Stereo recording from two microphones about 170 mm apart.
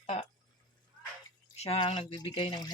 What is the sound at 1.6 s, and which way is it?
Speech, 35° left (ahead or behind).